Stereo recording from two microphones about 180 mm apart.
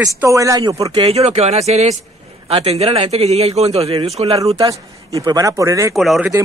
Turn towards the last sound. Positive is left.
turn(degrees=0)  # may be behind; listen again after turning